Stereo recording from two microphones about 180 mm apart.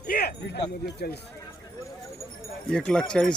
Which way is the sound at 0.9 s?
65° left (ahead or behind).